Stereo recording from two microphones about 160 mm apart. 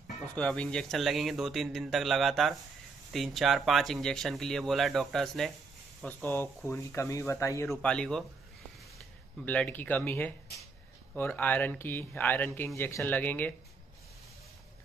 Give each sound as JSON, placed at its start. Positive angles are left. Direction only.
{"t": 0.4, "sound": "a man's voice", "side_deg": 5}
{"t": 7.7, "sound": "a man's voice", "side_deg": 5}
{"t": 9.4, "sound": "speech", "side_deg": 10}